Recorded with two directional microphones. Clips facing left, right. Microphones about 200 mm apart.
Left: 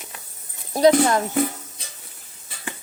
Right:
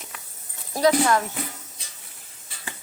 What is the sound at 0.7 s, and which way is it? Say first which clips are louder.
Speech: left 4 dB; 25° left (ahead or behind).